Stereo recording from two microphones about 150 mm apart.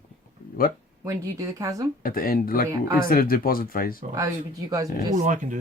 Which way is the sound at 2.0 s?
75° left (ahead or behind).